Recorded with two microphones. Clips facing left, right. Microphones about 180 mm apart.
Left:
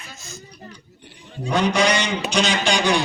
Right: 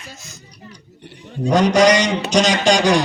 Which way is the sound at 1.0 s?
60° right (ahead or behind).